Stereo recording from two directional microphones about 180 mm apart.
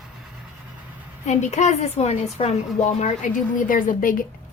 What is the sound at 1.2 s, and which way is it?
A woman's voice, 40° left (ahead or behind).